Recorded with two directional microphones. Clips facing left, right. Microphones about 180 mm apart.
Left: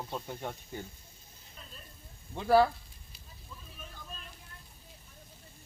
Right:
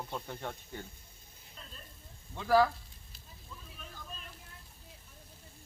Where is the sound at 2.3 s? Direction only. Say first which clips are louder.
Left 2 dB; 25° left (ahead or behind).